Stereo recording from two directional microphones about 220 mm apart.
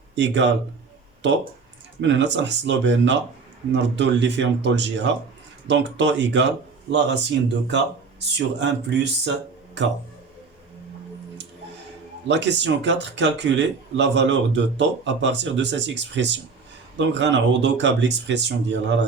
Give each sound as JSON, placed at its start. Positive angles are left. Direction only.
{"t": 0.2, "sound": "speech", "side_deg": -55}
{"t": 2.0, "sound": "speech", "side_deg": -55}
{"t": 12.3, "sound": "speech", "side_deg": -55}